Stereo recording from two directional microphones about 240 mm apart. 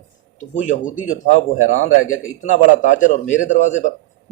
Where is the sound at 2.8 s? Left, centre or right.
Left.